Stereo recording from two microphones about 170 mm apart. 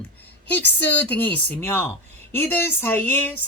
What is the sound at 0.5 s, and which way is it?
Speech, 10° left (ahead or behind).